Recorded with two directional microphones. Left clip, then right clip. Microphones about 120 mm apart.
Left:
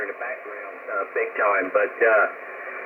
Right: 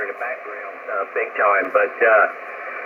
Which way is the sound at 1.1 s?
50° right (ahead or behind).